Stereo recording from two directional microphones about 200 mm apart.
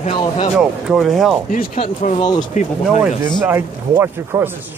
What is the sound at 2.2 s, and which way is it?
Speech, 20° left (ahead or behind).